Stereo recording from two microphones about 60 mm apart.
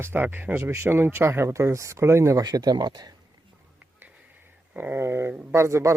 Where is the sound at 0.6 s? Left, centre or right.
Right.